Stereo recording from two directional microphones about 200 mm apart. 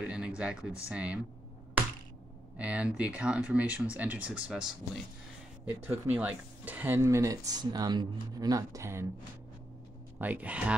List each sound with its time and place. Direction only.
0.0 s a sound: 5° right (ahead or behind)
0.4 s speech: 5° right (ahead or behind)
2.5 s speech: 5° right (ahead or behind)
5.9 s speech: 10° right (ahead or behind)
10.1 s speech: 10° right (ahead or behind)